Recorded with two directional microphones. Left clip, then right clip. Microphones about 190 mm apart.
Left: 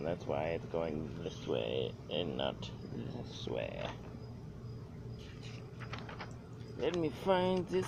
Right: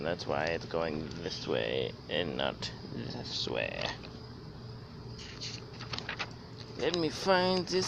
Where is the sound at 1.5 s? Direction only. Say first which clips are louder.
Right 4 dB; 45° right (ahead or behind).